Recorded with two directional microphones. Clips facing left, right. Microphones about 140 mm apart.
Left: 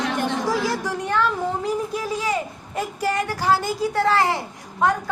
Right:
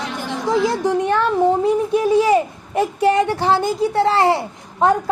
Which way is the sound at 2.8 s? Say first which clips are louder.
Right 8 dB; 25° right (ahead or behind).